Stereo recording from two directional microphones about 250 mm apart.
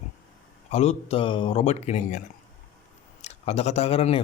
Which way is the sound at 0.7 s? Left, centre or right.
Left.